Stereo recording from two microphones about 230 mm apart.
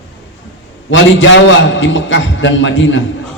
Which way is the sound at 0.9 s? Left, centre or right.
Left.